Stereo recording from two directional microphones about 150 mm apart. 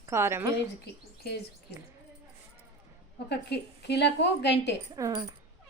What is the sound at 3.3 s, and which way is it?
Speech, 90° left.